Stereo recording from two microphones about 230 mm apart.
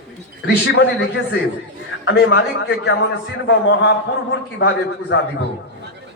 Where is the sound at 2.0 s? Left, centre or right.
Left.